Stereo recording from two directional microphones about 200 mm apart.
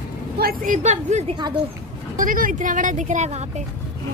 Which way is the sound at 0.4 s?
45° right (ahead or behind).